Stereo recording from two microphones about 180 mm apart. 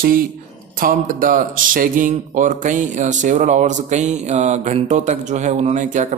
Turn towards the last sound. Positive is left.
turn(degrees=-45)  # may be behind; listen again after turning